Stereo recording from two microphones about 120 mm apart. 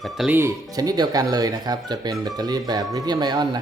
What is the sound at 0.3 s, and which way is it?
Speech, 20° right (ahead or behind).